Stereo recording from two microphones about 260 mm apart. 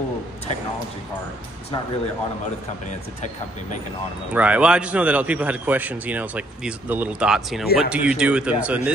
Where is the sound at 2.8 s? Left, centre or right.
Left.